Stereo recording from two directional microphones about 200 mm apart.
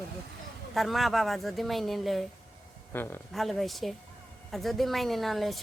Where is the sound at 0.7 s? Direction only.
Centre (ahead or behind).